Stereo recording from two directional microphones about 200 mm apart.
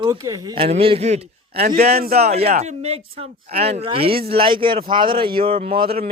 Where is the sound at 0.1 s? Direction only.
20° right (ahead or behind).